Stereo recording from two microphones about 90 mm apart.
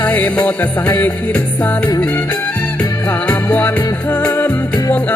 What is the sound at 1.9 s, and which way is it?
Music, 45° left (ahead or behind).